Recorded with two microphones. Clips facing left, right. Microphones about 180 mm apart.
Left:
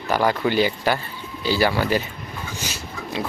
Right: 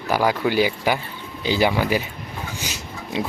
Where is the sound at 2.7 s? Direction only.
15° right (ahead or behind).